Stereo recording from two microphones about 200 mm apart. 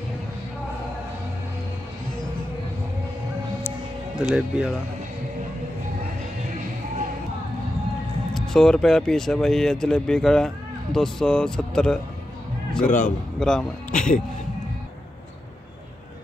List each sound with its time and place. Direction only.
4.2 s speech: 5° right (ahead or behind)
8.3 s speech: centre (ahead or behind)
12.8 s a man's voice: 40° left (ahead or behind)
13.4 s speech: 5° left (ahead or behind)
13.9 s a man's voice: 40° left (ahead or behind)